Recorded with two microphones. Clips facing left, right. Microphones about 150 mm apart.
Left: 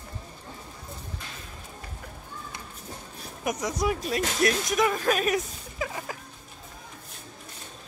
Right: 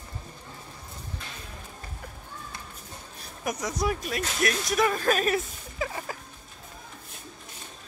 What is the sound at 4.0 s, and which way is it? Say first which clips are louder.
Speech: left 3 dB; 25° left (ahead or behind).